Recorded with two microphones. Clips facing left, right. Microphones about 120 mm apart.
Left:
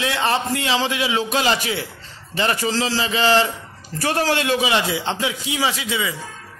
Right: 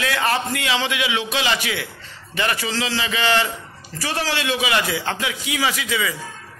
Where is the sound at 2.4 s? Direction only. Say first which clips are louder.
Left 3 dB; 35° left (ahead or behind).